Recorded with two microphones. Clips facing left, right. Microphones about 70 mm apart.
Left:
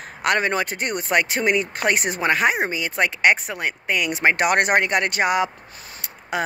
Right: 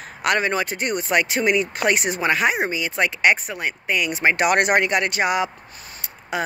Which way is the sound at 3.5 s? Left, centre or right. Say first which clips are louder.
Even; left.